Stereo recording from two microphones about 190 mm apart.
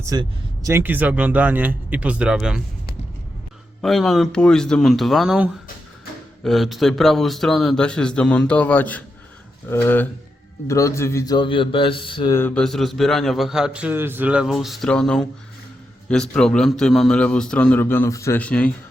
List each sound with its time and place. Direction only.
0.0 s speech: 20° right (ahead or behind)
3.8 s a man's voice: centre (ahead or behind); by 12.3 s 25° left (ahead or behind)
12.3 s a man's voice: 10° left (ahead or behind)